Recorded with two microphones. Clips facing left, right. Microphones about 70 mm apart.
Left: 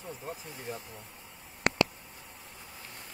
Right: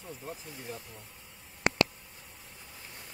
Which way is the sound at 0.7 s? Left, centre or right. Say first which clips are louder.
Left 3 dB; centre.